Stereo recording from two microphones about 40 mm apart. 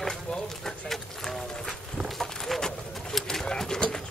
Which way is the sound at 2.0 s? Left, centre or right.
Centre.